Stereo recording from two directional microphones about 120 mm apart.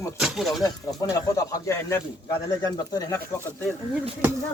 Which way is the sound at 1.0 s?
30° left (ahead or behind).